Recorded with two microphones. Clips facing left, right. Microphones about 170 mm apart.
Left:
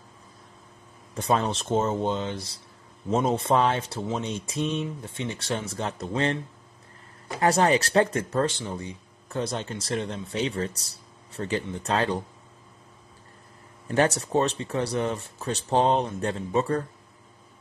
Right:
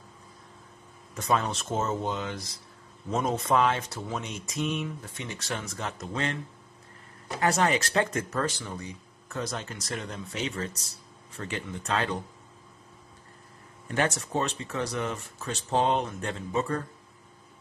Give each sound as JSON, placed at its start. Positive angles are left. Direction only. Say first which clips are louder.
{"t": 1.1, "sound": "speech", "louder": "left 3 dB", "side_deg": 30}
{"t": 7.3, "sound": "speech", "louder": "left 4 dB", "side_deg": 35}
{"t": 13.8, "sound": "speech", "louder": "left 5 dB", "side_deg": 35}